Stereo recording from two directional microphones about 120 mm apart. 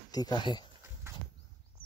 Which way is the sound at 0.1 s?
35° left (ahead or behind).